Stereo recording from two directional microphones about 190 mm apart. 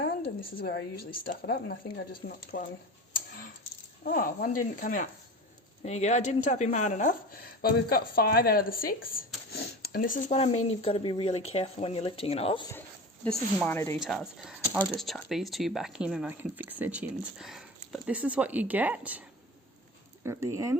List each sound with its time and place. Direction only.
0.6 s speech: 55° left (ahead or behind)
4.0 s speech: 50° left (ahead or behind); by 12.6 s 30° left (ahead or behind)
13.2 s speech: 5° left (ahead or behind)
14.0 s speech: centre (ahead or behind)
20.2 s speech: 15° right (ahead or behind)